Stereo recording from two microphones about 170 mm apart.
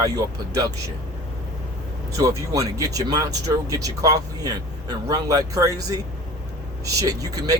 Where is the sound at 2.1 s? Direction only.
20° right (ahead or behind).